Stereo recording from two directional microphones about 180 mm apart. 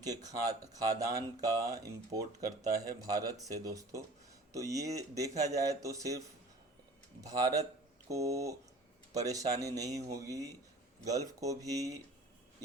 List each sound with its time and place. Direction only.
0.0 s speech: 20° right (ahead or behind)